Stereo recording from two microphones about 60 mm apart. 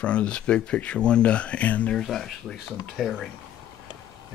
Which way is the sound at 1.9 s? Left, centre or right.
Centre.